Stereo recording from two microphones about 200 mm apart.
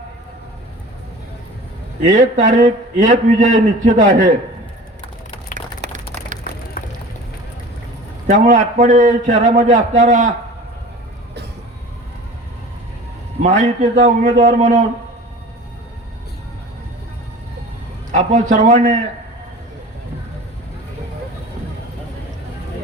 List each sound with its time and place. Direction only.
2.0 s a man's voice: 35° right (ahead or behind)
5.5 s a sound: 40° right (ahead or behind)
6.8 s music: 45° left (ahead or behind)
8.3 s a man's voice: 40° right (ahead or behind)
13.4 s a man's voice: 35° right (ahead or behind)
18.1 s a man's voice: 35° right (ahead or behind)